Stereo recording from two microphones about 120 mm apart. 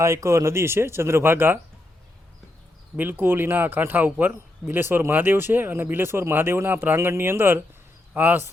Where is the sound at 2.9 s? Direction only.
15° right (ahead or behind).